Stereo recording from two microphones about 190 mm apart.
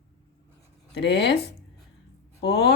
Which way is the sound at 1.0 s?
65° left (ahead or behind).